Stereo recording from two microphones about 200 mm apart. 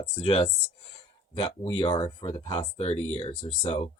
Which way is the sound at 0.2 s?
25° left (ahead or behind).